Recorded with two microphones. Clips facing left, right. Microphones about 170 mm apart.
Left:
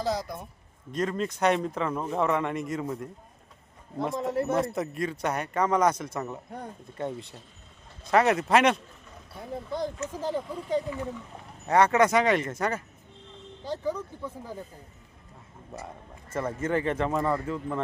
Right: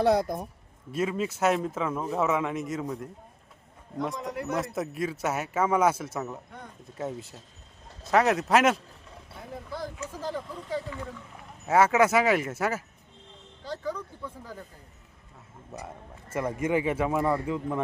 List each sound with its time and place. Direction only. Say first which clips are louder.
0.0 s speech: right 7 dB; 60° right (ahead or behind)
0.9 s a man's voice: even; 5° right (ahead or behind)
4.3 s speech: left 6 dB; 30° left (ahead or behind)
4.5 s a man's voice: left 3 dB; centre (ahead or behind)
10.1 s speech: left 3 dB; 15° left (ahead or behind)
11.6 s a man's voice: even; 5° right (ahead or behind)
13.7 s speech: left 3 dB; 10° left (ahead or behind)
15.7 s a man's voice: even; 5° right (ahead or behind)